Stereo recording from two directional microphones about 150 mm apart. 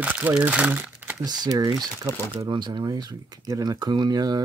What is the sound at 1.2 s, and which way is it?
Speech, 25° right (ahead or behind).